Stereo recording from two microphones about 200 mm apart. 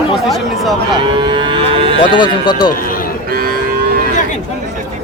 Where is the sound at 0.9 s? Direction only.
20° right (ahead or behind).